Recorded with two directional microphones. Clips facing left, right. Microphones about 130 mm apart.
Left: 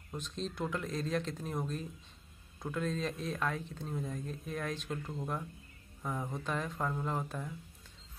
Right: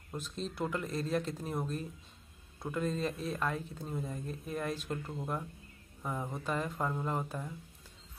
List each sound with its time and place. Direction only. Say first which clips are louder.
0.1 s speech: even; 5° right (ahead or behind)